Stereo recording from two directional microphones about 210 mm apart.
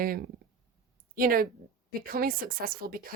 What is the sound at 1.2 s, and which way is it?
A woman's voice, 45° right (ahead or behind).